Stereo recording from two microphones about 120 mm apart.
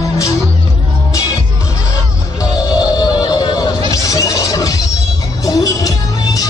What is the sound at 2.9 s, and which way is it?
Music, 35° left (ahead or behind).